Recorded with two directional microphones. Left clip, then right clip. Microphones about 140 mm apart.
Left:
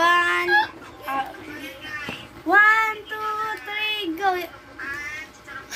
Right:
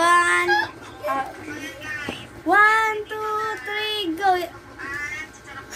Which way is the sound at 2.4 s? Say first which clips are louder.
Even; 25° right (ahead or behind).